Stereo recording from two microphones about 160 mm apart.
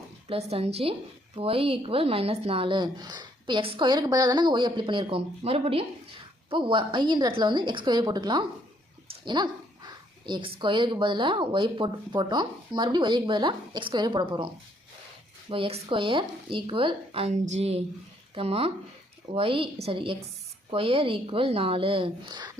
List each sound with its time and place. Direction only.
0.5 s speech: 40° right (ahead or behind)